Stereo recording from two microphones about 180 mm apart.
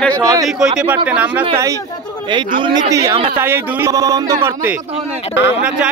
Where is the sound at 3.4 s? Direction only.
15° right (ahead or behind).